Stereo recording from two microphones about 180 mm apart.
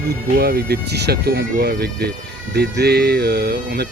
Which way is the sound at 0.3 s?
60° right (ahead or behind).